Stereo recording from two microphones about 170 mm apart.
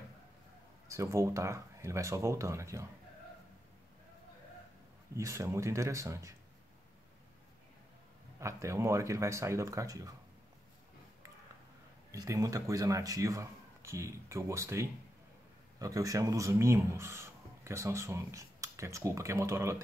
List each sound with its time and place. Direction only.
0.8 s speech: 15° right (ahead or behind)
5.1 s speech: 20° right (ahead or behind)
8.4 s speech: 15° right (ahead or behind)
12.1 s speech: 20° right (ahead or behind)